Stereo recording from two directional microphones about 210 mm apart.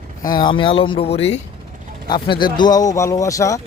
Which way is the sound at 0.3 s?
20° left (ahead or behind).